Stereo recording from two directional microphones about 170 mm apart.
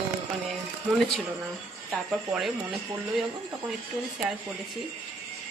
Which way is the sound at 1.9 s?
Centre (ahead or behind).